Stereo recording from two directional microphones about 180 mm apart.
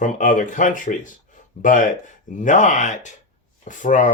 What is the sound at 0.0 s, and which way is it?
Speech, 45° left (ahead or behind).